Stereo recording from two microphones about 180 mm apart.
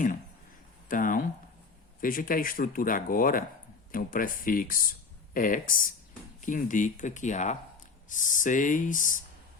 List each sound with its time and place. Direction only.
0.9 s speech: 50° left (ahead or behind)